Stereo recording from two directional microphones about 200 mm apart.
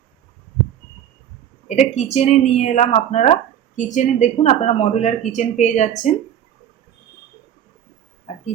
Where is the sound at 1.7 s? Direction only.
35° left (ahead or behind).